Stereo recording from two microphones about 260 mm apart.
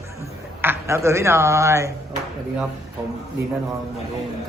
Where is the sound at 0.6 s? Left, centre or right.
Centre.